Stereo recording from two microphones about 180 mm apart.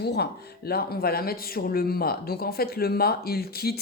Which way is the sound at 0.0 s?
65° left (ahead or behind).